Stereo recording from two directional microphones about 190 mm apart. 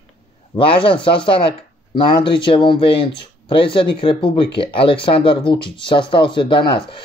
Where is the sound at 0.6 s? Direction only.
25° left (ahead or behind).